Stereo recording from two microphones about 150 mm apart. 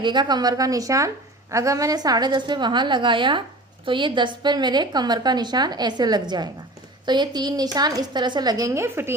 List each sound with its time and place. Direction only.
0.0 s a woman's voice: 30° right (ahead or behind)